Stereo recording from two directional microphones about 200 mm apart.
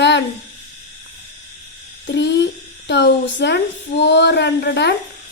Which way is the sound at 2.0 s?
60° left (ahead or behind).